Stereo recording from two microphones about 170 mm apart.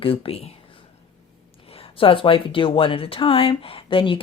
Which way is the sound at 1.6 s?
35° left (ahead or behind).